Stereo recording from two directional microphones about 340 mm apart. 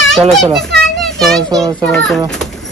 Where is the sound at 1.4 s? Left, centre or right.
Centre.